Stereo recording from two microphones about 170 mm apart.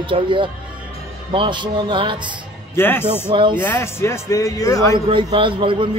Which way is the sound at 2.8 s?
15° left (ahead or behind).